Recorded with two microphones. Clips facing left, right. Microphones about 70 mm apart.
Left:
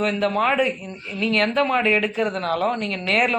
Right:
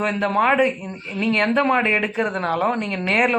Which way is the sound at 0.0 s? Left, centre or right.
Centre.